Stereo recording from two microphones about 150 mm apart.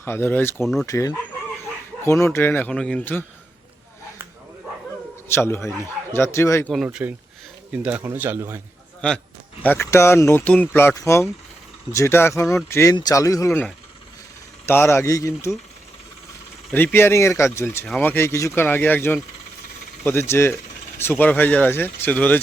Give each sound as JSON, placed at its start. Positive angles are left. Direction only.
{"t": 0.0, "sound": "speech", "side_deg": 15}
{"t": 0.6, "sound": "speech", "side_deg": 0}
{"t": 0.9, "sound": "speech", "side_deg": 20}
{"t": 5.3, "sound": "speech", "side_deg": 15}
{"t": 6.7, "sound": "speech", "side_deg": -5}
{"t": 9.0, "sound": "speech", "side_deg": 5}
{"t": 14.7, "sound": "speech", "side_deg": 15}
{"t": 16.7, "sound": "speech", "side_deg": 15}